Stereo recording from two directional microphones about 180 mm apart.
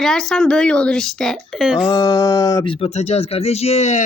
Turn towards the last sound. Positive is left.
turn(degrees=35)  # may be behind; listen again after turning